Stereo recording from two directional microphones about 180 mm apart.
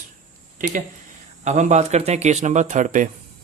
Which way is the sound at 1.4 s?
40° right (ahead or behind).